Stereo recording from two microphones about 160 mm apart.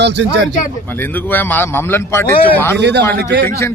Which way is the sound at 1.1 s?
10° left (ahead or behind).